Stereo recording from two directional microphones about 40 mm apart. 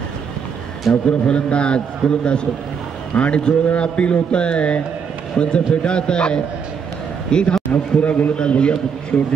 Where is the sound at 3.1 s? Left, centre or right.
Left.